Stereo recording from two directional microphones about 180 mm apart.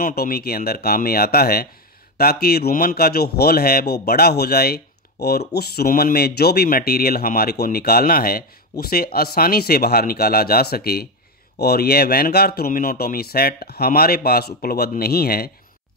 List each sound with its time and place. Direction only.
0.0 s speech: 55° left (ahead or behind)